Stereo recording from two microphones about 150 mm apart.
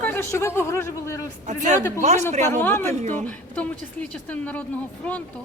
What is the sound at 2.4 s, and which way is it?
A woman's voice, 15° left (ahead or behind).